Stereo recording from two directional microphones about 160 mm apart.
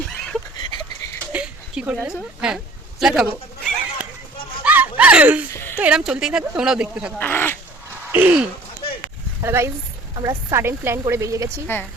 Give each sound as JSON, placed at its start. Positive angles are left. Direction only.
{"t": 1.3, "sound": "speech", "side_deg": -10}
{"t": 3.0, "sound": "a sound", "side_deg": -5}
{"t": 5.7, "sound": "speech", "side_deg": -5}
{"t": 7.2, "sound": "speech", "side_deg": 10}
{"t": 8.1, "sound": "a woman's voice", "side_deg": -10}